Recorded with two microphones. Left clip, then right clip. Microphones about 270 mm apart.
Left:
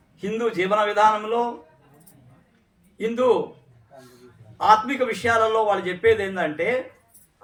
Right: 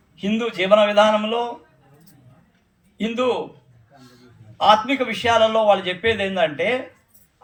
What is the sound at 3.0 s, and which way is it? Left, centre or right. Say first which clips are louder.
Speech: even; left.